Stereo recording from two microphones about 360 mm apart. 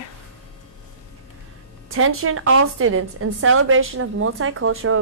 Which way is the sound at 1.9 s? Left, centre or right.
Right.